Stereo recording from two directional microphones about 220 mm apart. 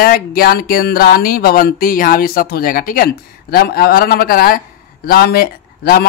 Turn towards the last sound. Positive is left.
turn(degrees=45)  # may be behind; listen again after turning